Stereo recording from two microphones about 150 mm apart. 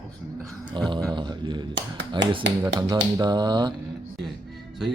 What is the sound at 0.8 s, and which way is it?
Speech, 30° right (ahead or behind).